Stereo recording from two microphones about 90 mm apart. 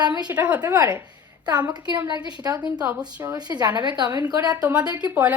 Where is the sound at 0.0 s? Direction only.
50° right (ahead or behind).